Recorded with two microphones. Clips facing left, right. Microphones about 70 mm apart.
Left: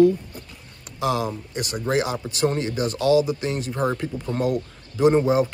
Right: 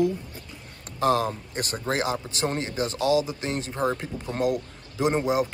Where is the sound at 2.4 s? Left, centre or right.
Right.